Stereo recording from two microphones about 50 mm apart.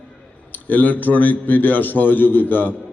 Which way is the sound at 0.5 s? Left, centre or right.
Left.